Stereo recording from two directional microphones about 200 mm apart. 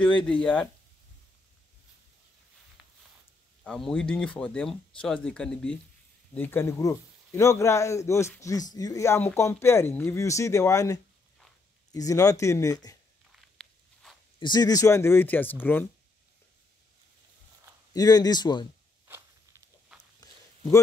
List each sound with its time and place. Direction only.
0.3 s speech: 5° left (ahead or behind)
2.8 s a sound: 5° right (ahead or behind)
3.6 s speech: 5° left (ahead or behind)
13.4 s walk: centre (ahead or behind)
14.4 s speech: 20° left (ahead or behind)
17.9 s speech: 20° left (ahead or behind)
19.9 s walk: 5° right (ahead or behind)